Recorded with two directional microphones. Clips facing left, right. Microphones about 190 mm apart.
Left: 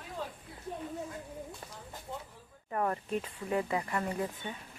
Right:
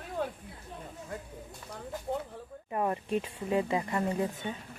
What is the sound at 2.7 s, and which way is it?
Speech, 20° right (ahead or behind).